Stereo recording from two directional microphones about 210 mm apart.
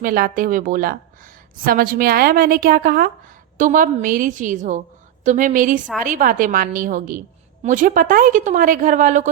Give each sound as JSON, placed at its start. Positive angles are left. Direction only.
{"t": 0.0, "sound": "a woman's voice", "side_deg": -40}